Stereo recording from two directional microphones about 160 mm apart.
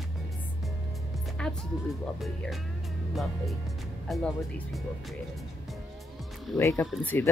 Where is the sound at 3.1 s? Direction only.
Centre (ahead or behind).